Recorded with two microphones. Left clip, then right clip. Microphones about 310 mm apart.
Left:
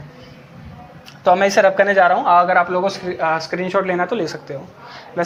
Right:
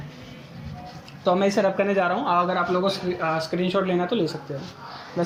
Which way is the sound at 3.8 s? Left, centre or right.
Left.